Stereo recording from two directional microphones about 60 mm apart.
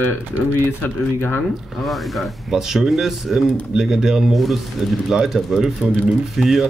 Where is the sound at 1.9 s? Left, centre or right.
Centre.